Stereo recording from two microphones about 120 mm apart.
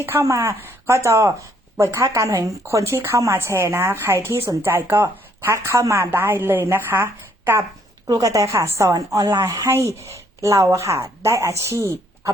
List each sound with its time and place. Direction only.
0.0 s speech: 20° right (ahead or behind)